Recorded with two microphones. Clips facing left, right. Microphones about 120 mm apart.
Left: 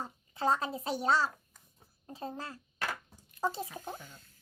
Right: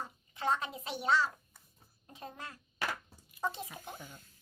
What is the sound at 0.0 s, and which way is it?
A child's voice, 35° left (ahead or behind).